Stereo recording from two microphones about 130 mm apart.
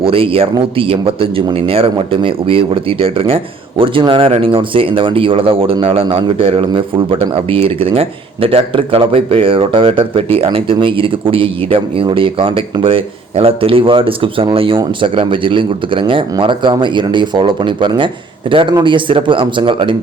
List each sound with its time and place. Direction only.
0.0 s a man's voice: 45° right (ahead or behind)